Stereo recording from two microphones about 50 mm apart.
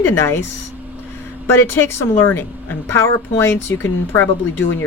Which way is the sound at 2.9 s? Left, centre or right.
Left.